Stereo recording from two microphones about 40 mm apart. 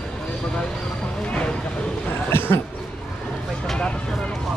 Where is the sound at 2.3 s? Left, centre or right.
Left.